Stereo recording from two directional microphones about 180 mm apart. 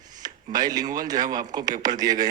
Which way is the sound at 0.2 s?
20° right (ahead or behind).